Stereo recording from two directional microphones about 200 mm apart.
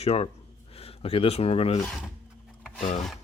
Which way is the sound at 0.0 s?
30° left (ahead or behind).